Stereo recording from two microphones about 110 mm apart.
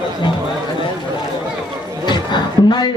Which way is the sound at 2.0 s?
40° left (ahead or behind).